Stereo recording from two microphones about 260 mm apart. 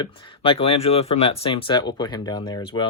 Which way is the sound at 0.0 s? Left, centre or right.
Centre.